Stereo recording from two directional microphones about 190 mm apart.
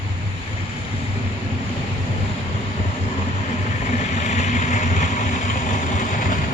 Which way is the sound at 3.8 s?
40° left (ahead or behind).